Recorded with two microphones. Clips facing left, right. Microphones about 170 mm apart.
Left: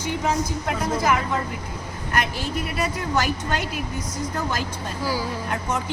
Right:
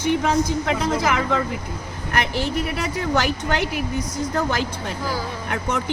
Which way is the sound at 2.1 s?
75° right (ahead or behind).